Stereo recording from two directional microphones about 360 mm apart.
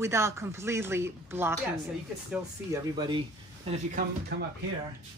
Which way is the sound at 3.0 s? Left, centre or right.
Centre.